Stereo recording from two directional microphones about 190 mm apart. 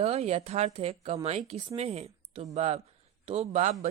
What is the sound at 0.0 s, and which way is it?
A woman's voice, 35° right (ahead or behind).